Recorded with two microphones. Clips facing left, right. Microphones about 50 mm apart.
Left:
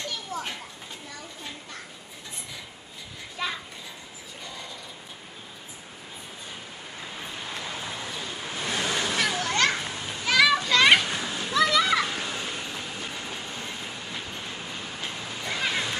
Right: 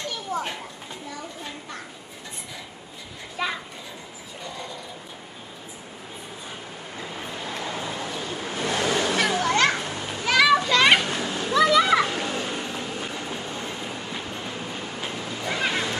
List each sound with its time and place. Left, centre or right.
3.4 s children playing: centre
7.3 s vehicle: right
9.4 s children playing: centre
9.8 s children playing: right
10.2 s children playing: centre
11.0 s children playing: right
11.5 s children playing: centre
12.1 s cat: right
13.0 s train: right
15.0 s a sound: centre
15.4 s music: centre